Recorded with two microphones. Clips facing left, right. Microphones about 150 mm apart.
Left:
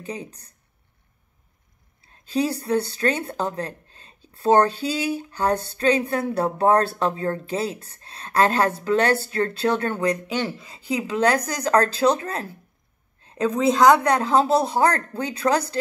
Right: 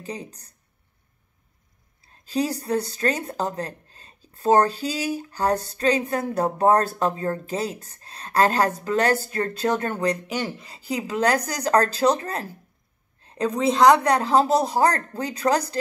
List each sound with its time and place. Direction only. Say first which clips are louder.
0.0 s speech: left 1 dB; 35° right (ahead or behind)
2.0 s speech: left 1 dB; 35° right (ahead or behind)
13.5 s a woman's voice: even; centre (ahead or behind)
14.0 s speech: even; 35° right (ahead or behind)